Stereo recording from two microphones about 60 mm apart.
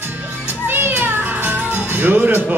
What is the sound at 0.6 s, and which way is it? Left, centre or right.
Music, right.